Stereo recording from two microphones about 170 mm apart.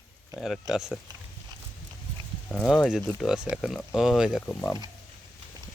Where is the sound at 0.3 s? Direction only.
Centre (ahead or behind).